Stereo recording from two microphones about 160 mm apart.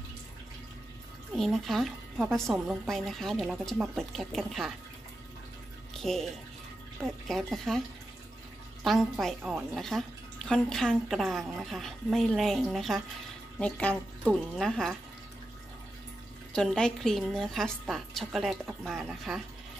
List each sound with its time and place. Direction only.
1.3 s speech: centre (ahead or behind)
5.9 s speech: centre (ahead or behind)
8.8 s speech: centre (ahead or behind)
9.4 s speech: 10° right (ahead or behind)
9.8 s speech: centre (ahead or behind)
16.5 s speech: 5° left (ahead or behind)